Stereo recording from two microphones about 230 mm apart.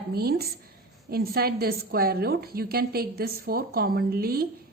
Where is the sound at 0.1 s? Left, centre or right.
Right.